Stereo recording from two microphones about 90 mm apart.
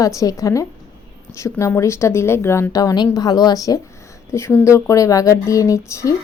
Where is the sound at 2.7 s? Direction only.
40° left (ahead or behind).